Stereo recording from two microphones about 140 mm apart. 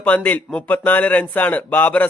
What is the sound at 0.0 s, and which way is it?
Speech, 10° left (ahead or behind).